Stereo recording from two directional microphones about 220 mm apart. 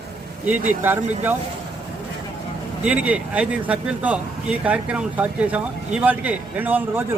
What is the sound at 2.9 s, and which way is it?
A man's voice, 5° right (ahead or behind).